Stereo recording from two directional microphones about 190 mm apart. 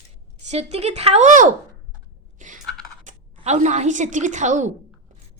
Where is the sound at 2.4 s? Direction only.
45° right (ahead or behind).